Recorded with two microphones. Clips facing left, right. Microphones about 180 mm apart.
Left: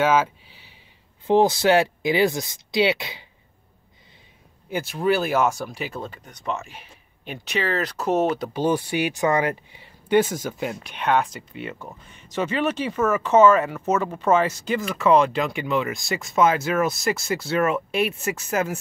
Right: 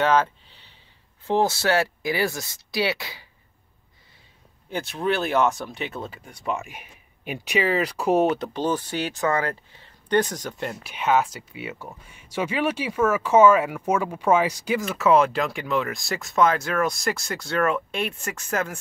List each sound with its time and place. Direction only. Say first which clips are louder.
0.0 s speech: left 1 dB; 5° left (ahead or behind)
4.6 s speech: left 3 dB; 5° left (ahead or behind)
8.6 s speech: left 4 dB; 10° left (ahead or behind)